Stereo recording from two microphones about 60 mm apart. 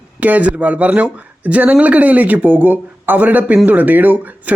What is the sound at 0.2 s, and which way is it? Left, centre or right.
A man's voice, right.